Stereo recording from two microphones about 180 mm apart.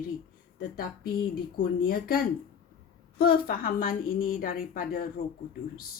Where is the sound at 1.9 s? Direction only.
55° left (ahead or behind).